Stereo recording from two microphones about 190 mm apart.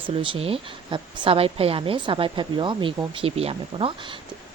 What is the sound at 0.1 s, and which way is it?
Speech, 30° right (ahead or behind).